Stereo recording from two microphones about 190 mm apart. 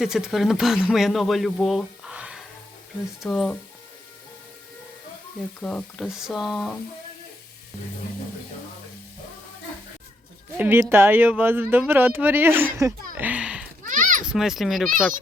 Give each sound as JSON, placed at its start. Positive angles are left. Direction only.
{"t": 0.0, "sound": "speech", "side_deg": 0}
{"t": 5.5, "sound": "speech", "side_deg": 5}
{"t": 10.6, "sound": "speech", "side_deg": -10}
{"t": 13.8, "sound": "a sound", "side_deg": -45}
{"t": 14.3, "sound": "speech", "side_deg": 0}